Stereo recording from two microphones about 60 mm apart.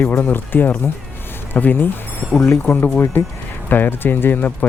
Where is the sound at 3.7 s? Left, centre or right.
Left.